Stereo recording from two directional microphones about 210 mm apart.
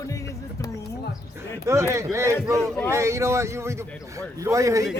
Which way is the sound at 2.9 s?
15° right (ahead or behind).